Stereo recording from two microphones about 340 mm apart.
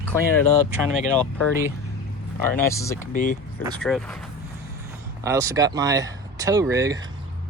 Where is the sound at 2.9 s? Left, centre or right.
Left.